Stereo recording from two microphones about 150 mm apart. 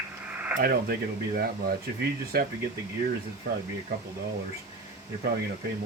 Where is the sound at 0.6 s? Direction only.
90° right.